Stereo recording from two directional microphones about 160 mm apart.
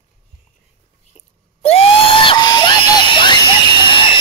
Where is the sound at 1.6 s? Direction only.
40° left (ahead or behind).